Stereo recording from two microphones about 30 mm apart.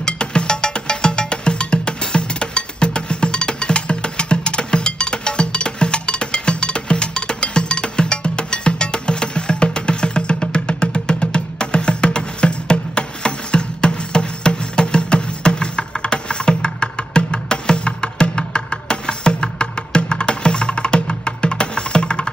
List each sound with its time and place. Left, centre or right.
0.0 s music: left